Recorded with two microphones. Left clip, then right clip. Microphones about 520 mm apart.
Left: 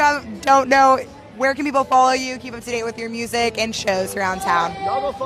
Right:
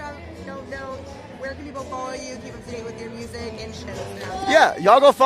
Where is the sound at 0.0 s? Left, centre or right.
Left.